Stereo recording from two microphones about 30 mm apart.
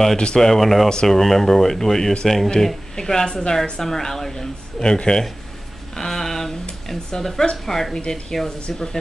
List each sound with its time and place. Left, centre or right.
0.2 s speech: left
0.6 s speech: centre
0.8 s speech: centre
3.0 s speech: centre
5.9 s a sound: centre
6.9 s speech: centre